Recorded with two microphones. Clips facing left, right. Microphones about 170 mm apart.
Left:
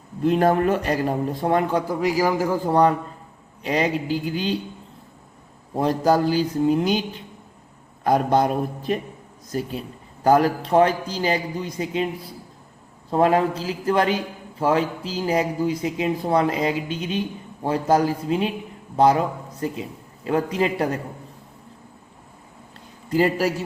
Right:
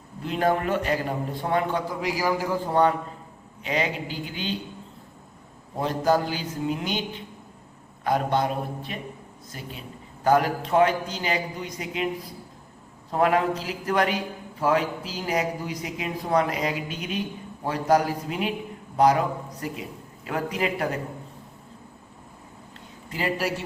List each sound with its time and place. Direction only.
0.3 s a man's voice: 45° left (ahead or behind)
4.3 s a man's voice: 40° left (ahead or behind)
5.8 s a man's voice: 40° left (ahead or behind)
8.0 s a man's voice: 40° left (ahead or behind)
13.1 s a man's voice: 30° left (ahead or behind)
23.0 s a man's voice: 40° left (ahead or behind)